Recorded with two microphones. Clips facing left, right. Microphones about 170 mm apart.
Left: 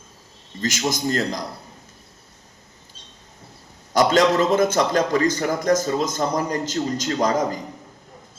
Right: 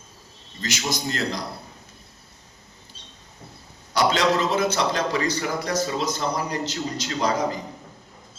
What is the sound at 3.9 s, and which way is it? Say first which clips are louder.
A man's voice: left 4 dB; 45° left (ahead or behind).